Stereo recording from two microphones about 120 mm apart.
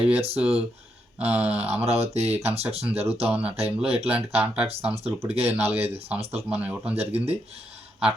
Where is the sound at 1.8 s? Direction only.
60° right (ahead or behind).